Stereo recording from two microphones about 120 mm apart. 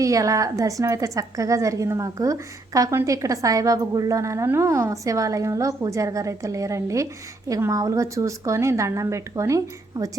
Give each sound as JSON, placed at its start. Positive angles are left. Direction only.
{"t": 0.0, "sound": "a woman's voice", "side_deg": -25}